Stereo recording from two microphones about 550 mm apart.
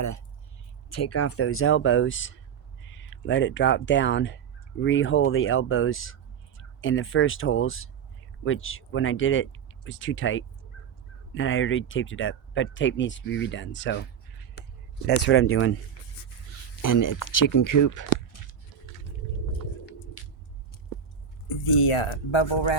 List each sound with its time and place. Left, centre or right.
0.9 s speech: left
15.0 s speech: centre
16.8 s speech: left
21.8 s speech: left